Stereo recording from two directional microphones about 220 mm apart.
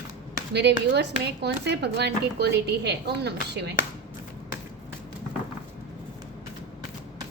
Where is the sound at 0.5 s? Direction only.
50° right (ahead or behind).